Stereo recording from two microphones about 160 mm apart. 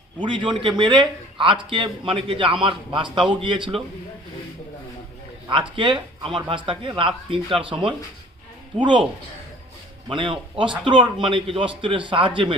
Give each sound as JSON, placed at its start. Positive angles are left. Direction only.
{"t": 0.2, "sound": "a man's voice", "side_deg": -30}
{"t": 5.7, "sound": "a man's voice", "side_deg": -30}
{"t": 8.8, "sound": "speech", "side_deg": -30}
{"t": 10.1, "sound": "a man's voice", "side_deg": -30}